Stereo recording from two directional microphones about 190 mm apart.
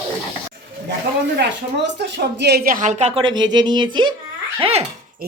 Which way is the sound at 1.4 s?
65° right (ahead or behind).